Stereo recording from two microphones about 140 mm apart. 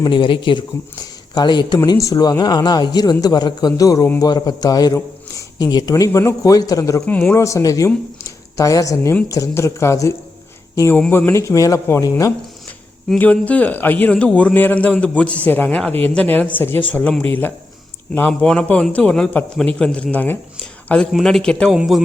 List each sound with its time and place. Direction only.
0.0 s a man's voice: 35° left (ahead or behind)
4.9 s a sound: 20° left (ahead or behind)
5.7 s a man's voice: 25° left (ahead or behind)
7.0 s a man's voice: 10° left (ahead or behind)
8.2 s a sound: 25° left (ahead or behind)
9.3 s a man's voice: 20° left (ahead or behind)
10.9 s a man's voice: 10° left (ahead or behind)
13.1 s a man's voice: 10° left (ahead or behind)